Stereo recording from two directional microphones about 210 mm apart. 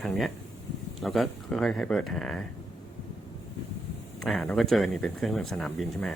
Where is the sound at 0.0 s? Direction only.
Centre (ahead or behind).